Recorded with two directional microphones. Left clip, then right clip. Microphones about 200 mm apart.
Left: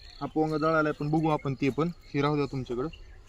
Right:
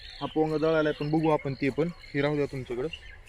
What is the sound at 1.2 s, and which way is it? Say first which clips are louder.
Speech: right 3 dB; 45° left (ahead or behind).